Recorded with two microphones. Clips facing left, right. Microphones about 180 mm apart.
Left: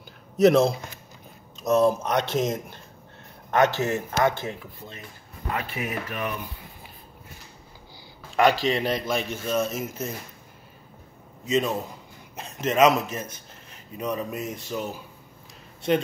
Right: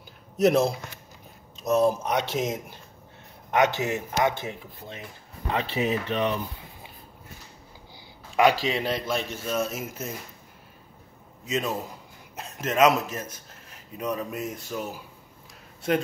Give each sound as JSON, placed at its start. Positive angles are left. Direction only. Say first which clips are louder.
{"t": 0.4, "sound": "speech", "louder": "left 3 dB", "side_deg": -5}
{"t": 8.4, "sound": "a man's voice", "louder": "left 1 dB", "side_deg": -5}
{"t": 11.4, "sound": "a man's voice", "louder": "left 4 dB", "side_deg": -5}